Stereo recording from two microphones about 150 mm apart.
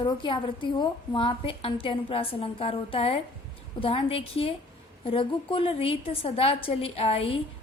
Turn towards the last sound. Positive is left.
turn(degrees=40)  # may be behind; listen again after turning